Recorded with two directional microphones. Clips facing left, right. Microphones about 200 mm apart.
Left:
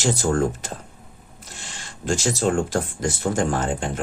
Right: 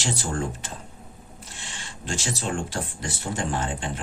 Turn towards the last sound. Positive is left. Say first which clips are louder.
# left 6 dB
turn(degrees=45)  # may be behind; listen again after turning